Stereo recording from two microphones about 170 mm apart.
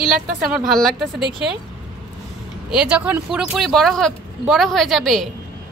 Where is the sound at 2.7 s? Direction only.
5° right (ahead or behind).